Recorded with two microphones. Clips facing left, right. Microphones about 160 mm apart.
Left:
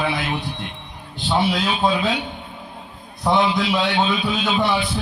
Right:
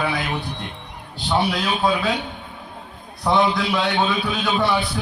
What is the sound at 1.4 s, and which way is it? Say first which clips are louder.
Speech: left 1 dB; 20° left (ahead or behind).